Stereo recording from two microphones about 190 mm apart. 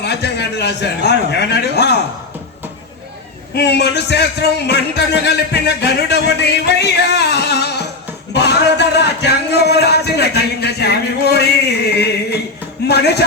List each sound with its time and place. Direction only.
0.0 s a man's voice: 60° left (ahead or behind)
3.5 s a man's voice: 60° left (ahead or behind)